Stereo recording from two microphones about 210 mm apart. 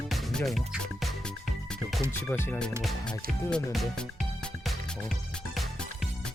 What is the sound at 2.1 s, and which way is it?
Speech, 10° left (ahead or behind).